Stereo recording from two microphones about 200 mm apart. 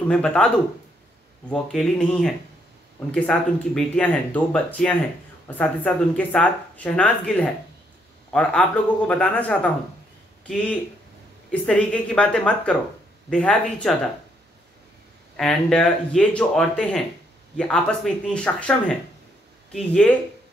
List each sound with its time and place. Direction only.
0.1 s speech: 5° left (ahead or behind)
1.5 s speech: 5° left (ahead or behind)
15.3 s speech: 5° left (ahead or behind)